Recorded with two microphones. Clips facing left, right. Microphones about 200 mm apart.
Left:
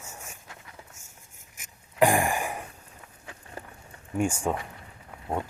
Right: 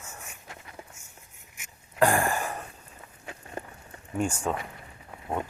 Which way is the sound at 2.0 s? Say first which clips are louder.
Left 1 dB; 15° left (ahead or behind).